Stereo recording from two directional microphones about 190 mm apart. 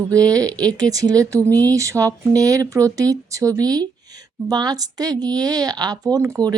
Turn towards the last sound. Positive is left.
turn(degrees=-15)  # may be behind; listen again after turning